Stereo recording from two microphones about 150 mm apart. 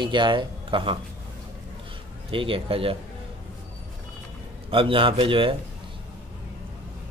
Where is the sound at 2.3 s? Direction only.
35° right (ahead or behind).